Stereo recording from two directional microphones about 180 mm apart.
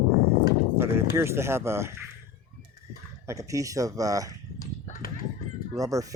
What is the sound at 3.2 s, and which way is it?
Speech, 15° right (ahead or behind).